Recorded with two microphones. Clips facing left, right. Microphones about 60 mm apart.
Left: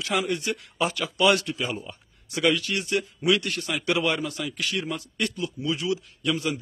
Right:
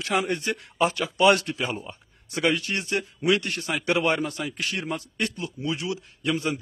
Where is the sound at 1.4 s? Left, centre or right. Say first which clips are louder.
Right 1 dB; right.